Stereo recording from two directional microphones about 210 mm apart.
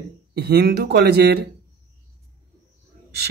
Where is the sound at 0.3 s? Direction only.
50° right (ahead or behind).